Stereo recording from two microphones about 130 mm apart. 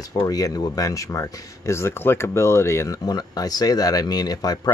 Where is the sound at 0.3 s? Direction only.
30° left (ahead or behind).